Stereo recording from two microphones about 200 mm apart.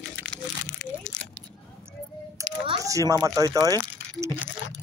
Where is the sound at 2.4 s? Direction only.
15° right (ahead or behind).